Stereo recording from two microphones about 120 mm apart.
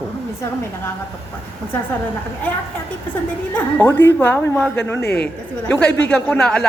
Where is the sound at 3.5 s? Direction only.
15° left (ahead or behind).